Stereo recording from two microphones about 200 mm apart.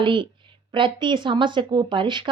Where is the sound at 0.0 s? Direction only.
25° right (ahead or behind).